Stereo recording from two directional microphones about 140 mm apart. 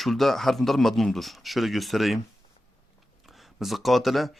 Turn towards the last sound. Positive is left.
turn(degrees=0)  # may be behind; listen again after turning